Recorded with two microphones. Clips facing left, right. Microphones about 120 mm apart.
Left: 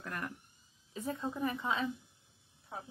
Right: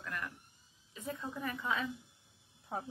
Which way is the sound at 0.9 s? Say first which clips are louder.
Left 4 dB; 30° left (ahead or behind).